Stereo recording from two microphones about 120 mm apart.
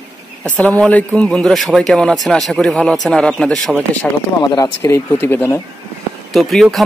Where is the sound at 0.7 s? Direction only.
10° left (ahead or behind).